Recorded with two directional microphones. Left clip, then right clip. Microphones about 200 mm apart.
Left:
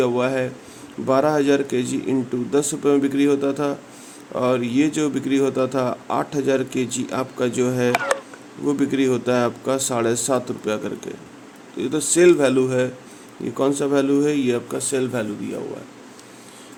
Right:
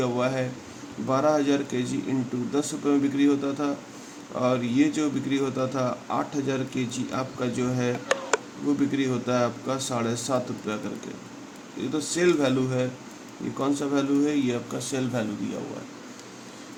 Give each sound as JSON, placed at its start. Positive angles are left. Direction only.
{"t": 0.0, "sound": "speech", "side_deg": 35}
{"t": 11.8, "sound": "speech", "side_deg": 40}